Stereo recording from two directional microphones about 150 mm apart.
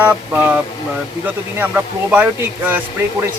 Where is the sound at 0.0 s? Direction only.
10° right (ahead or behind).